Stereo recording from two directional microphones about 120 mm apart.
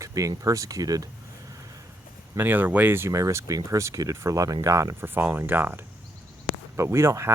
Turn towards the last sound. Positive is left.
turn(degrees=-25)  # may be behind; listen again after turning